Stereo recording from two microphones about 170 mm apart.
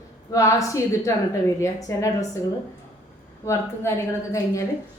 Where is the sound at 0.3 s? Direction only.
20° left (ahead or behind).